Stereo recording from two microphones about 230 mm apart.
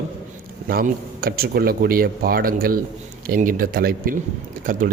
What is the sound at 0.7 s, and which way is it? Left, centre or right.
Speech, right.